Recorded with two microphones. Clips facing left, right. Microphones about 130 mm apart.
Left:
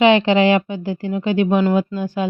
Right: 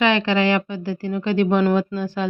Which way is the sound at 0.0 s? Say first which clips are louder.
Left 5 dB; 20° left (ahead or behind).